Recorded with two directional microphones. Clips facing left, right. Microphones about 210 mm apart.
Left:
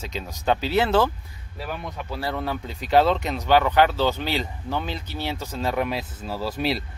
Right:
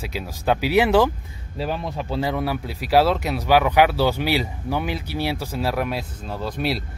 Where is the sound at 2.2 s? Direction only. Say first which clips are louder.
Right 3 dB; 10° right (ahead or behind).